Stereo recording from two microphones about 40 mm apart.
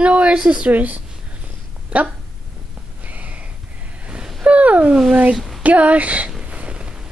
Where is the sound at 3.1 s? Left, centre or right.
Right.